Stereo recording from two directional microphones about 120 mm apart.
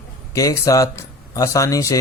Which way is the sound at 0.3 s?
30° left (ahead or behind).